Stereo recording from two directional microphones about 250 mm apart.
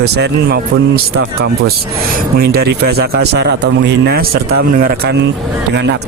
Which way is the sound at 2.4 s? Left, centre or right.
Right.